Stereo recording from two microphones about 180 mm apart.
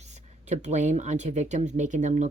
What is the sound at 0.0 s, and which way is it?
Speech, 40° right (ahead or behind).